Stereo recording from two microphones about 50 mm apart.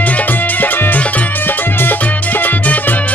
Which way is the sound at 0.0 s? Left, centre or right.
Left.